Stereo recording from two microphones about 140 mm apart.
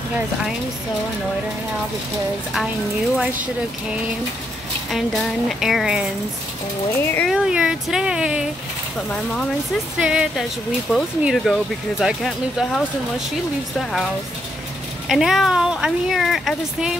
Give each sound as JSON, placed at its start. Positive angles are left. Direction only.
{"t": 4.9, "sound": "speech", "side_deg": 0}
{"t": 7.0, "sound": "speech", "side_deg": 15}
{"t": 7.2, "sound": "speech", "side_deg": -5}
{"t": 9.9, "sound": "speech", "side_deg": -5}
{"t": 15.0, "sound": "speech", "side_deg": 0}